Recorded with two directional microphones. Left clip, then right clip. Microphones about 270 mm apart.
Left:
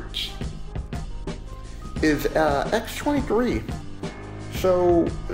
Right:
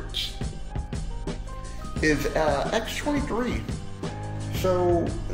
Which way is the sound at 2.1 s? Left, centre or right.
Centre.